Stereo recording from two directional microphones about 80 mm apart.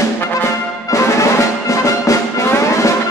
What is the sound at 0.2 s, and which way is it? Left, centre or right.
Brass instrument, left.